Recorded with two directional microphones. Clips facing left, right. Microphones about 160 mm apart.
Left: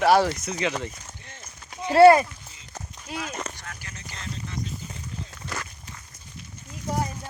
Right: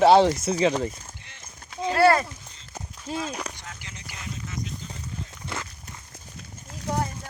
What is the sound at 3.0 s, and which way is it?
Speech, 30° right (ahead or behind).